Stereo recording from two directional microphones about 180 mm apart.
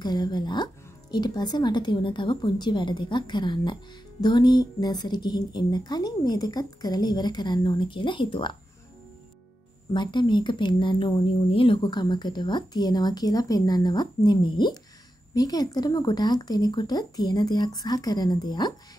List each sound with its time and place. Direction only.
0.0 s a woman's voice: 25° left (ahead or behind)
9.9 s a woman's voice: 25° left (ahead or behind)